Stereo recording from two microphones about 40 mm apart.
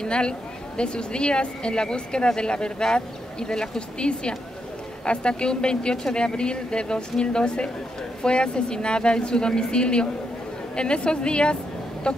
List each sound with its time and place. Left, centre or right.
0.0 s speech: left